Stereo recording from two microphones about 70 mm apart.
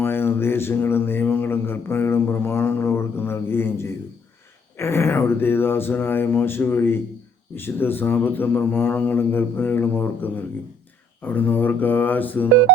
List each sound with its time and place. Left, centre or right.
0.0 s mantra: left
7.5 s speech: left